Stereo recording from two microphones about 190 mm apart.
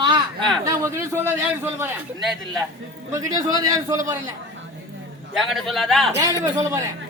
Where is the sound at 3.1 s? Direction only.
20° right (ahead or behind).